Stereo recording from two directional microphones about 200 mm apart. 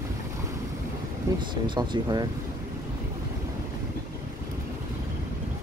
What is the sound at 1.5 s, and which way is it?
Speech, 20° right (ahead or behind).